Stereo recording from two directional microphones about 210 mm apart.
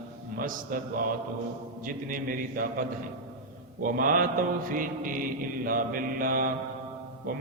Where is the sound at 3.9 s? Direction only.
40° right (ahead or behind).